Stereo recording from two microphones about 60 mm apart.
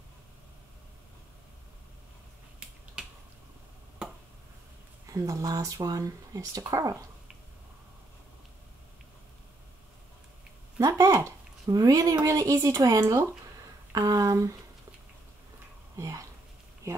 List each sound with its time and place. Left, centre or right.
5.1 s speech: right
10.8 s speech: right
13.9 s a sound: right
16.0 s speech: right
16.8 s speech: right